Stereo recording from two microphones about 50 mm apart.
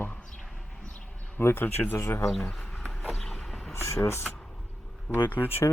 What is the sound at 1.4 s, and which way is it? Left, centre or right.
Speech, left.